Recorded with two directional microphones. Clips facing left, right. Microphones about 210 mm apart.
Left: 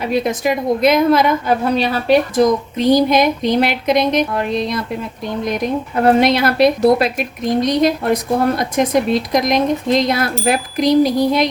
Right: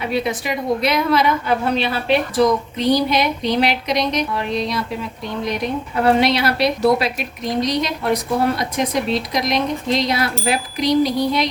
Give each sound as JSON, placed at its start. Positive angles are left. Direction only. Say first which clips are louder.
{"t": 0.1, "sound": "a woman's voice", "louder": "left 6 dB", "side_deg": 45}
{"t": 6.1, "sound": "a woman's voice", "louder": "left 4 dB", "side_deg": 50}